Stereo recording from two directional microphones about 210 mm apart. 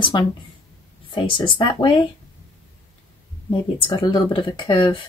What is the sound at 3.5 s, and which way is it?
Speech, 25° left (ahead or behind).